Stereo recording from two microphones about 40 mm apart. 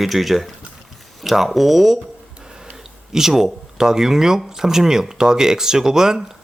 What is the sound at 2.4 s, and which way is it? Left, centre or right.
Tick-tock, centre.